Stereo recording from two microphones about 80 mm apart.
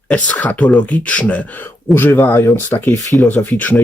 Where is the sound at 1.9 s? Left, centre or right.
Left.